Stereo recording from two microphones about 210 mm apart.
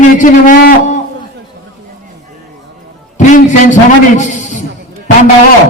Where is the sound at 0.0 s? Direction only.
35° left (ahead or behind).